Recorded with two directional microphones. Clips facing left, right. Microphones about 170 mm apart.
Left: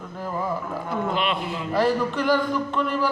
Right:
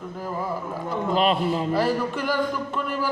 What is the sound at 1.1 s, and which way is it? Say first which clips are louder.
Speech: right 5 dB; 40° right (ahead or behind).